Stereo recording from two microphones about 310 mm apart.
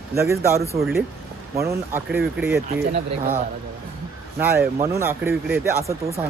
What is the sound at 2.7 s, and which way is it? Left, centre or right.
Speech, right.